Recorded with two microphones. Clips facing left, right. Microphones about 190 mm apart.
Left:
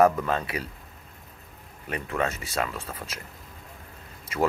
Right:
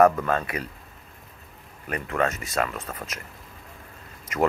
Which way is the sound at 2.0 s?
5° left (ahead or behind).